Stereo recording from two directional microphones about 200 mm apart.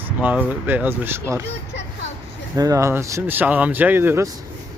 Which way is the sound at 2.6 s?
15° right (ahead or behind).